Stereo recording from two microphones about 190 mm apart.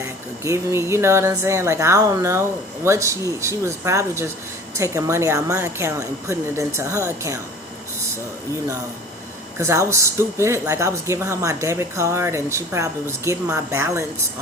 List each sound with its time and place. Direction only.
0.4 s speech: 15° right (ahead or behind)
9.6 s speech: 15° right (ahead or behind)